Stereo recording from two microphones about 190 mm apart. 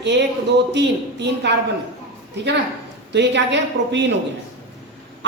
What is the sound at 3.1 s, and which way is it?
Speech, 65° right (ahead or behind).